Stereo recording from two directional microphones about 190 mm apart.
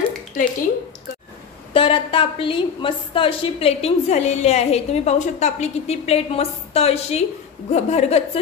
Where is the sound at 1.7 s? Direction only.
30° left (ahead or behind).